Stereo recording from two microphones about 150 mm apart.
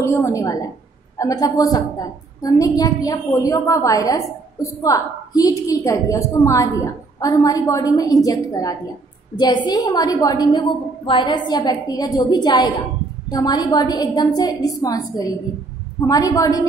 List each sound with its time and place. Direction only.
0.0 s a woman's voice: 20° left (ahead or behind)